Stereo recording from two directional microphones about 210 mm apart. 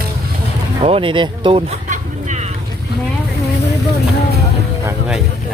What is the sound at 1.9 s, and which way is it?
Vehicle, 35° right (ahead or behind).